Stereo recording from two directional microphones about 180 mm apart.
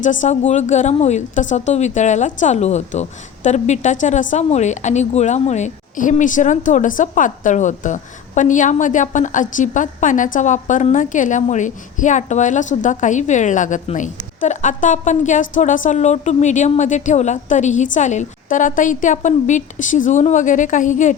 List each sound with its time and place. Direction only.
0.0 s a woman's voice: 45° left (ahead or behind)